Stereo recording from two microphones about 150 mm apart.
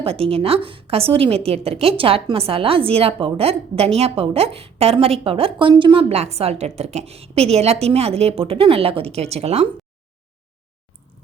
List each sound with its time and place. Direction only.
0.0 s a woman's voice: 40° right (ahead or behind)